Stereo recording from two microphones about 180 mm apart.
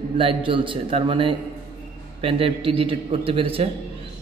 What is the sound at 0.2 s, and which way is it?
A man's voice, 30° right (ahead or behind).